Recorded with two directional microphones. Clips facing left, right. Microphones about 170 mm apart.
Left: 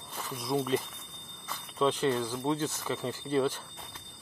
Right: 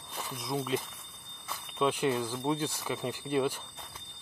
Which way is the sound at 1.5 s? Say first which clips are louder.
Left 1 dB; 10° right (ahead or behind).